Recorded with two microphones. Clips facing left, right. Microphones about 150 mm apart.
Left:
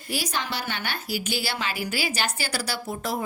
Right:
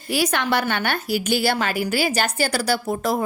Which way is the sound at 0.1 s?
65° right (ahead or behind).